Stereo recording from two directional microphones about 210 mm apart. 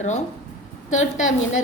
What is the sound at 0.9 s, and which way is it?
Speech, 70° left (ahead or behind).